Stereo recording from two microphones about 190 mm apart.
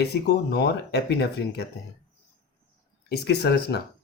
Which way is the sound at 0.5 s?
60° left (ahead or behind).